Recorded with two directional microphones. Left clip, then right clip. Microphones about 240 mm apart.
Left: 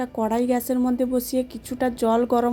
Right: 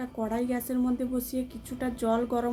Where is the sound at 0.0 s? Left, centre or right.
Left.